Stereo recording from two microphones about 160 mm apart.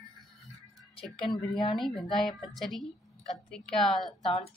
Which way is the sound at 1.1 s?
35° left (ahead or behind).